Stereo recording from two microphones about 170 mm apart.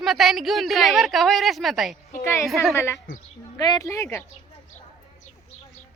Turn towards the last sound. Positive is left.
turn(degrees=15)  # may be behind; listen again after turning